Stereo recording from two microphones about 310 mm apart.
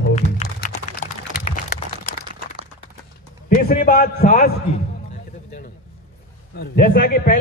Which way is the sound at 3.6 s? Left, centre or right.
Left.